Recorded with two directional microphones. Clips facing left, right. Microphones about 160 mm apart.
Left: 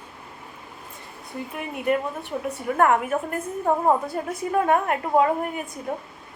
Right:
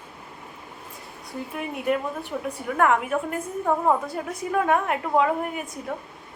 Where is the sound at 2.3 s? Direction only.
10° left (ahead or behind).